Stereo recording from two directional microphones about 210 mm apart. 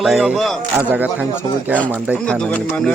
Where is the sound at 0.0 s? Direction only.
5° right (ahead or behind).